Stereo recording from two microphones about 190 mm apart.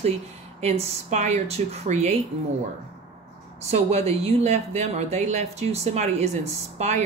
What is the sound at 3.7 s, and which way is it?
Speech, 35° right (ahead or behind).